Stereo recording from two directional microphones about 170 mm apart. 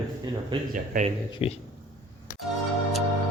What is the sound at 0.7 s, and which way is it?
Speech, 55° right (ahead or behind).